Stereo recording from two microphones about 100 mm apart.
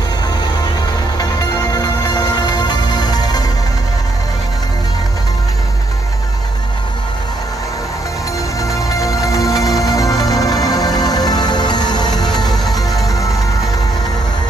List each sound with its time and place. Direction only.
1.1 s music: 40° left (ahead or behind)
8.5 s music: 35° left (ahead or behind)